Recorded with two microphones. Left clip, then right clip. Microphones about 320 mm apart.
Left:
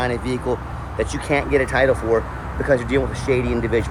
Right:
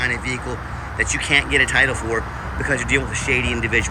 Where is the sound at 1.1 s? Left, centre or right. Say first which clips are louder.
Right 3 dB; centre.